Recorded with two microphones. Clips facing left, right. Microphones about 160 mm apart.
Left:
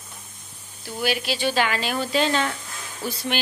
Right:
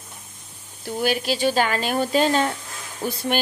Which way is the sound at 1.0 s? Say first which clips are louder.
Right 3 dB; 45° right (ahead or behind).